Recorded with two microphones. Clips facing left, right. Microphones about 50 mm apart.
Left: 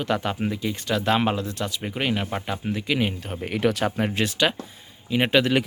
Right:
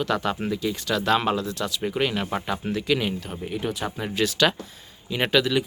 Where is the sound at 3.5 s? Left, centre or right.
Left.